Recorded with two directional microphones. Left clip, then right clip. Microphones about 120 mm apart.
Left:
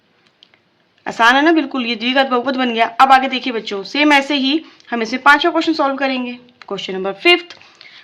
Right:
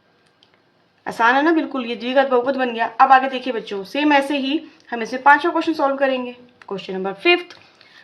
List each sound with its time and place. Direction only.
1.0 s speech: 40° left (ahead or behind)